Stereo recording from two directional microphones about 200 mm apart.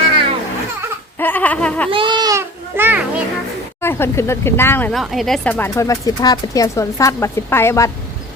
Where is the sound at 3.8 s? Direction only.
10° left (ahead or behind).